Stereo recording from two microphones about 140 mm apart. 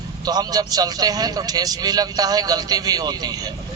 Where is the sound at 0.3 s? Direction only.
30° right (ahead or behind).